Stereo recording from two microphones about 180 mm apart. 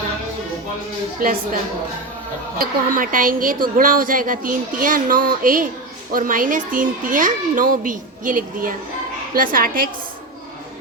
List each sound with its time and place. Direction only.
1.2 s a woman's voice: 50° right (ahead or behind)
2.6 s a woman's voice: 50° right (ahead or behind)